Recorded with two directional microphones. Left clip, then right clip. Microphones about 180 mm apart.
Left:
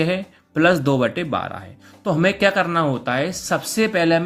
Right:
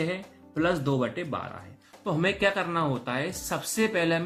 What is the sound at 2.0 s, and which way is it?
Speech, 35° left (ahead or behind).